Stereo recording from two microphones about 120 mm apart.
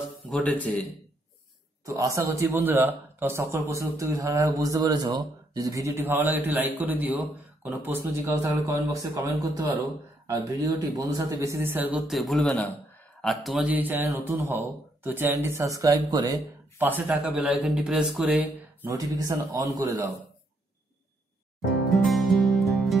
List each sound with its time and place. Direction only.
0.3 s speech: 10° left (ahead or behind)
1.9 s speech: 25° right (ahead or behind)
9.7 s speech: 15° right (ahead or behind)
10.4 s speech: 30° right (ahead or behind)
12.1 s a man's voice: centre (ahead or behind)
13.7 s speech: 15° right (ahead or behind)
15.8 s speech: 30° right (ahead or behind)
16.7 s speech: 15° right (ahead or behind)
18.9 s speech: 30° right (ahead or behind)
21.9 s music: centre (ahead or behind)